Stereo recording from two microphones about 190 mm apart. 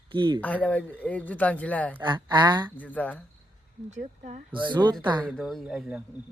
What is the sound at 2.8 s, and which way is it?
Speech, 10° left (ahead or behind).